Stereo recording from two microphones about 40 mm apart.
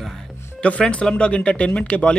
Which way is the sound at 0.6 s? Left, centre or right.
Left.